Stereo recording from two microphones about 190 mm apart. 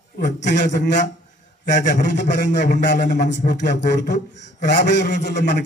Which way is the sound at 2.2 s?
65° left (ahead or behind).